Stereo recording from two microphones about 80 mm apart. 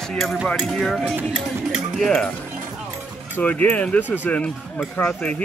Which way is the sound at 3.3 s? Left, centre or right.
Left.